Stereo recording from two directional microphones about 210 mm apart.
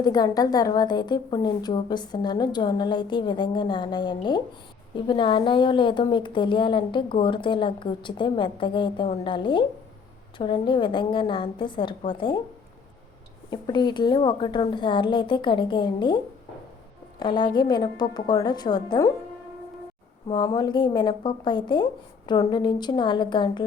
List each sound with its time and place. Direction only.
0.0 s a woman's voice: 20° left (ahead or behind)
13.5 s a woman's voice: 20° left (ahead or behind)
20.2 s a woman's voice: 20° left (ahead or behind)